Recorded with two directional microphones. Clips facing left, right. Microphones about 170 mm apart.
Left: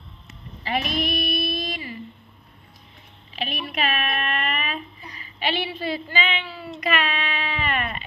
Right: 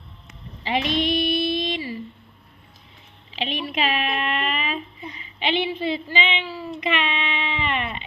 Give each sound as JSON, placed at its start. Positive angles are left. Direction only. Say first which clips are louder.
{"t": 0.6, "sound": "speech", "louder": "right 3 dB", "side_deg": -25}
{"t": 1.1, "sound": "music", "louder": "right 4 dB", "side_deg": -25}
{"t": 3.3, "sound": "a sound", "louder": "right 3 dB", "side_deg": -25}